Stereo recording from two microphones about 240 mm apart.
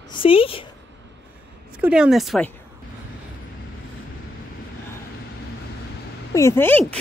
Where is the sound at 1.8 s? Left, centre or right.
Centre.